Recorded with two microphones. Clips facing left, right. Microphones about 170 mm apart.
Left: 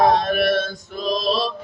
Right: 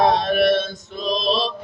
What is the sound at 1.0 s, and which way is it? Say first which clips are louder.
Mantra: even; 25° right (ahead or behind).